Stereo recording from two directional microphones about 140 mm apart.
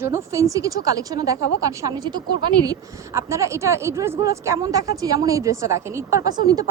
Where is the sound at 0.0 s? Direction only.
20° right (ahead or behind).